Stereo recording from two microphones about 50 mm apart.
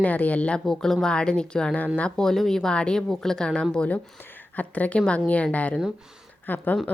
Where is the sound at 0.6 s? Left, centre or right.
Centre; by 2.1 s left.